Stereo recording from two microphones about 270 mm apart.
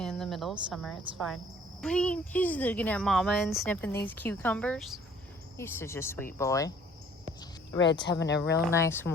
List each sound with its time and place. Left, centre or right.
0.0 s a sound: centre
0.7 s speech: centre
7.9 s speech: centre
8.3 s speech: left
8.7 s speech: centre